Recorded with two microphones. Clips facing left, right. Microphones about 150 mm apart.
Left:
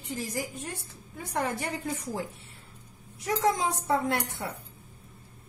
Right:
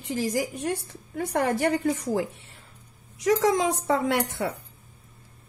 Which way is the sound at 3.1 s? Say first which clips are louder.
Right 5 dB; 90° right.